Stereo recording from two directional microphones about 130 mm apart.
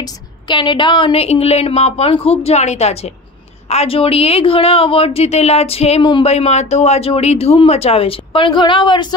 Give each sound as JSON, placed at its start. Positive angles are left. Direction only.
{"t": 0.0, "sound": "a woman's voice", "side_deg": 35}
{"t": 6.2, "sound": "a woman's voice", "side_deg": 55}